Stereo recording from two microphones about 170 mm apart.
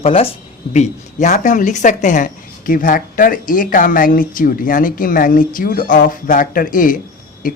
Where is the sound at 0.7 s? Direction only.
45° left (ahead or behind).